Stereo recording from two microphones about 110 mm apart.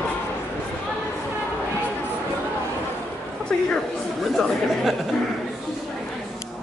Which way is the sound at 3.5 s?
5° left (ahead or behind).